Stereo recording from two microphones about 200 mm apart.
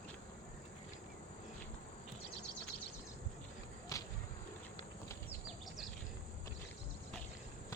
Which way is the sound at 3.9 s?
15° left (ahead or behind).